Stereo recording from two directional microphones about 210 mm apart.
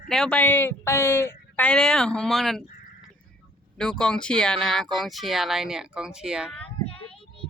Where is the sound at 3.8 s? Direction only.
5° left (ahead or behind).